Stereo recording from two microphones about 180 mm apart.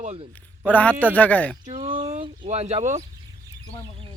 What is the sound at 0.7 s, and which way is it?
Speech, 10° left (ahead or behind).